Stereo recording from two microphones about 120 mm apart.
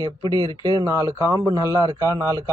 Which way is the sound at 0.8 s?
25° right (ahead or behind).